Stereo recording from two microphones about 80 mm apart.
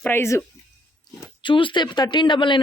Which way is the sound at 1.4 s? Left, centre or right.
Left.